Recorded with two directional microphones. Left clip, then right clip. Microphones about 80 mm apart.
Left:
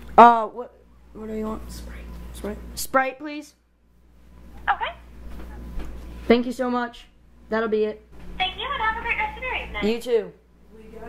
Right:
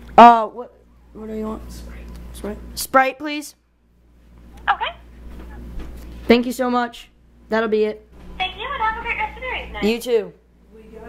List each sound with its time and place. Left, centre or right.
0.1 s a man's voice: right
1.1 s a woman's voice: centre
2.9 s a woman's voice: right
4.6 s dog: right
6.2 s speech: right
8.7 s a sound: centre
9.8 s a woman's voice: right